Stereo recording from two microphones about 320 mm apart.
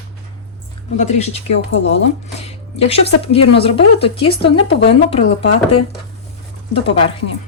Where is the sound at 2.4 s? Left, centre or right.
Centre.